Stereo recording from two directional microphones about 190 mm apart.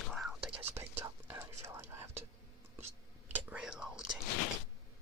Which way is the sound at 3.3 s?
10° right (ahead or behind).